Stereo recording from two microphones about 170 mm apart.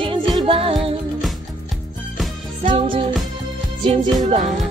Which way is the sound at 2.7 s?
30° right (ahead or behind).